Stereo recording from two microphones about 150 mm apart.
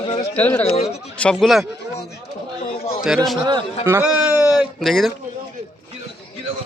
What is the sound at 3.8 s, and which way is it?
Speech, 15° right (ahead or behind).